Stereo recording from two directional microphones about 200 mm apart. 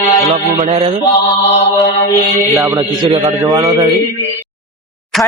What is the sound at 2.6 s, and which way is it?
A man's voice, 15° right (ahead or behind).